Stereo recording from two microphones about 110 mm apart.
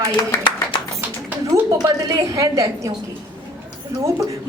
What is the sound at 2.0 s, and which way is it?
Speech, 30° right (ahead or behind).